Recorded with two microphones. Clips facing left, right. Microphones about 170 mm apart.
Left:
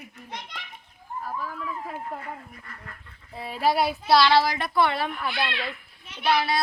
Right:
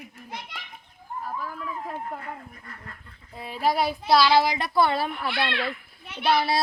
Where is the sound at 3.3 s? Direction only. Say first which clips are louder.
Left 1 dB; centre (ahead or behind).